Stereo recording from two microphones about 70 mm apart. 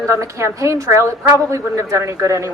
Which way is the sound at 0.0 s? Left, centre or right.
Right.